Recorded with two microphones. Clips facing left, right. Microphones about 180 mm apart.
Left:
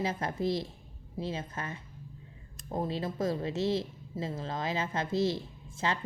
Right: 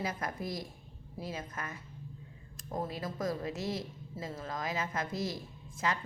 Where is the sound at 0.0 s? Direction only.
30° left (ahead or behind).